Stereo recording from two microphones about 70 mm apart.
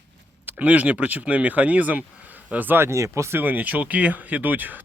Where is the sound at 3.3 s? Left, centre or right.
Right.